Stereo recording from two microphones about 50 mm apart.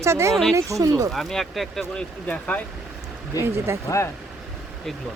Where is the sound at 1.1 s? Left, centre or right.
Centre.